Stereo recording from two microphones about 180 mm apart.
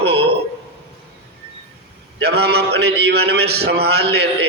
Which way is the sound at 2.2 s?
65° right (ahead or behind).